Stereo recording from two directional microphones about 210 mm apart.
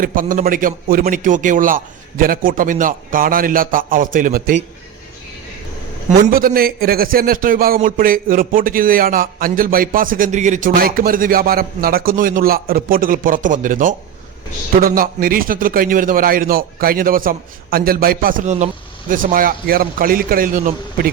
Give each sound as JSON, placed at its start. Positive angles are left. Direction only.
{"t": 0.0, "sound": "a man's voice", "side_deg": -40}
{"t": 6.1, "sound": "a man's voice", "side_deg": -40}